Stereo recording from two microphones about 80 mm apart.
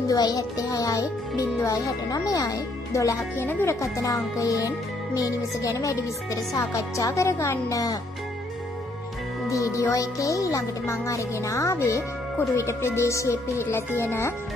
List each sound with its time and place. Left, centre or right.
0.1 s speech: left
3.4 s speech: left
3.8 s speech: left
7.7 s speech: left
9.5 s speech: left